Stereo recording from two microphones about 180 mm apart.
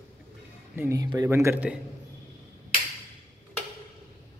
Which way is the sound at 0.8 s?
20° right (ahead or behind).